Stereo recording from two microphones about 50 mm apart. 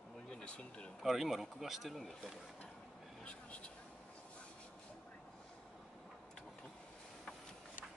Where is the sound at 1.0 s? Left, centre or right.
Centre.